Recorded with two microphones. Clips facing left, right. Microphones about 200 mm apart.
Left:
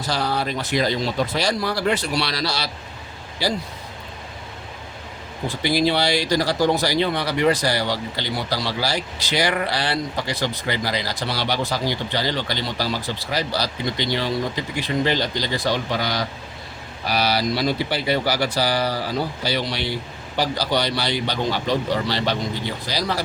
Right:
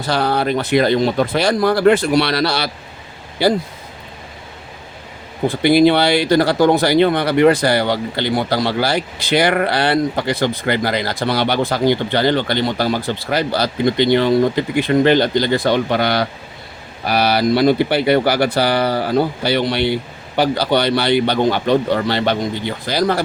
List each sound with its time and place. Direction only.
0.0 s speech: 60° right (ahead or behind)
5.5 s speech: 55° right (ahead or behind)